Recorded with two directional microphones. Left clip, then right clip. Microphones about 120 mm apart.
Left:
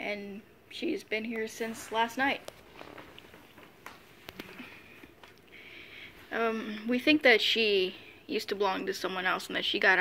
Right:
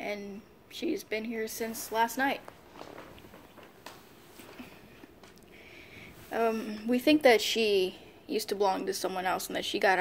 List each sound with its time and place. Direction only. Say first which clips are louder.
0.0 s a sound: even; 15° left (ahead or behind)
0.7 s a woman's voice: even; 15° left (ahead or behind)
5.7 s speech: left 3 dB; centre (ahead or behind)